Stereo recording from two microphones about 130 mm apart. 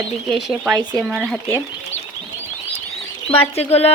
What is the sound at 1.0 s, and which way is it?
Speech, 5° right (ahead or behind).